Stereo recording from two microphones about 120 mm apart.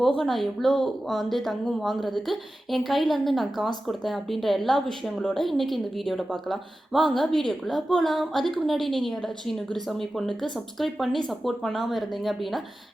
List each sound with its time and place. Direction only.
0.0 s a woman's voice: 5° left (ahead or behind)